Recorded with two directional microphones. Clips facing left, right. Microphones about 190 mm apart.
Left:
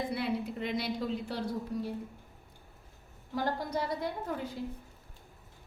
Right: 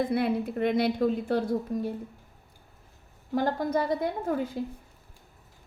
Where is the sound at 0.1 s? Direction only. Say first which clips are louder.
Right 6 dB; 55° right (ahead or behind).